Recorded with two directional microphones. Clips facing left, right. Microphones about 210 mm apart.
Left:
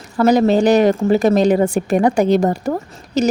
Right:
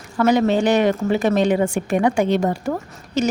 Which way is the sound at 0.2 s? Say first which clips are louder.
Left 4 dB; 35° left (ahead or behind).